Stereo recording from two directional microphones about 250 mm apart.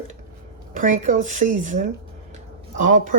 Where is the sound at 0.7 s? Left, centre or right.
Right.